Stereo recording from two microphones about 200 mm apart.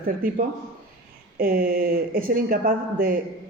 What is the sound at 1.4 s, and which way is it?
A woman's voice, 45° right (ahead or behind).